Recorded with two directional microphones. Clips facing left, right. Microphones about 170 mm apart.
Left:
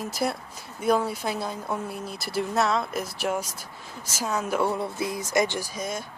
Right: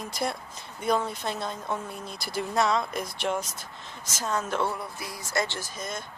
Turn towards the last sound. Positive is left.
turn(degrees=10)  # may be behind; listen again after turning